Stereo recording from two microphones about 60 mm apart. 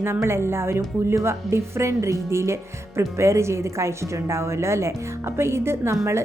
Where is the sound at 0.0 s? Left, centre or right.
Right.